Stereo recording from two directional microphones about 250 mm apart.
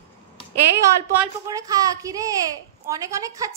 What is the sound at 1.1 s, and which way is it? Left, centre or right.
A woman's voice, centre.